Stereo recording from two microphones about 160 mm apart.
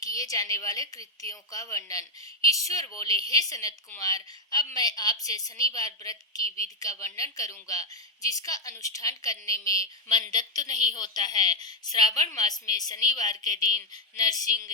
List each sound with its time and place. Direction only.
0.0 s a woman's voice: 20° left (ahead or behind)